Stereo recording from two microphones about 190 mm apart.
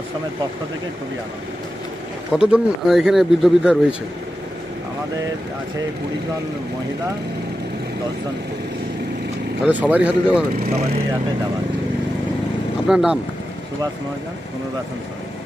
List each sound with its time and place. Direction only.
2.3 s speech: 5° right (ahead or behind)
9.7 s speech: 10° right (ahead or behind)
10.6 s speech: 35° right (ahead or behind)
12.8 s speech: 5° right (ahead or behind)